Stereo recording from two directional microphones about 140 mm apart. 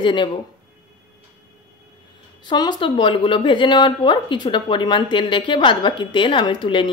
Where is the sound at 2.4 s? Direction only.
30° left (ahead or behind).